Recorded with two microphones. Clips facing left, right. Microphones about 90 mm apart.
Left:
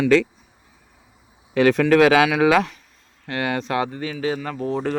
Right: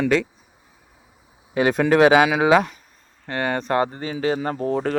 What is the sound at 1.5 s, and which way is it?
Speech, 20° right (ahead or behind).